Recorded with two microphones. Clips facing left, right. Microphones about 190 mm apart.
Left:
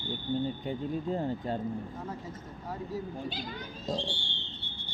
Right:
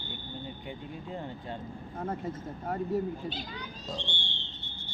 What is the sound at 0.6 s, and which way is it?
Speech, 40° left (ahead or behind).